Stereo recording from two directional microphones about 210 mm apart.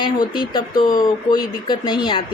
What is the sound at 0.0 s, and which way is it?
A woman's voice, 20° left (ahead or behind).